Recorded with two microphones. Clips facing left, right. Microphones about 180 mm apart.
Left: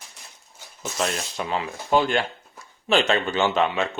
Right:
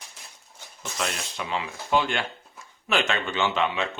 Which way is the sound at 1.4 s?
40° left (ahead or behind).